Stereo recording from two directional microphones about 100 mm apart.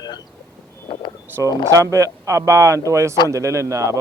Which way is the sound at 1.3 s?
20° right (ahead or behind).